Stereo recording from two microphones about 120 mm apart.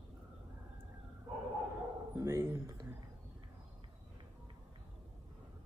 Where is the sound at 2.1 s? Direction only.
20° right (ahead or behind).